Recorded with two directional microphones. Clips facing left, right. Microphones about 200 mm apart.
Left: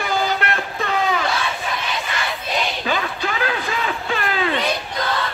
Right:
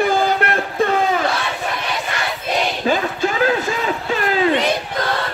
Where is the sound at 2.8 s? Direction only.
40° right (ahead or behind).